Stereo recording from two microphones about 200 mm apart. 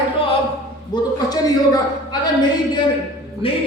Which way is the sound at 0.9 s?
20° left (ahead or behind).